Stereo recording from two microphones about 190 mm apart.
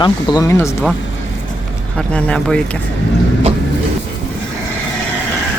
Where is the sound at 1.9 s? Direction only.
5° left (ahead or behind).